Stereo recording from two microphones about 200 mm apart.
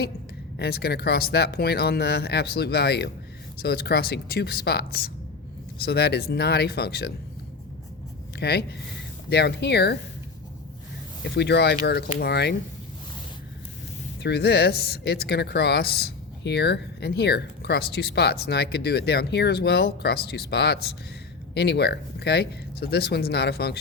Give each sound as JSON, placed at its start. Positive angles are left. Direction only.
{"t": 0.6, "sound": "speech", "side_deg": 55}
{"t": 8.4, "sound": "speech", "side_deg": 55}
{"t": 11.2, "sound": "speech", "side_deg": 60}
{"t": 14.2, "sound": "speech", "side_deg": 55}